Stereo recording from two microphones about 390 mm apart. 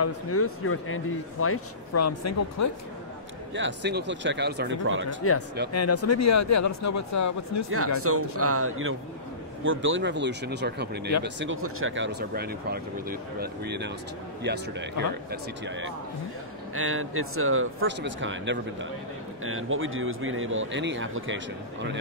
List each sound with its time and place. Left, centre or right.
0.0 s speech: left
3.5 s speech: right
5.2 s speech: left
8.0 s speech: right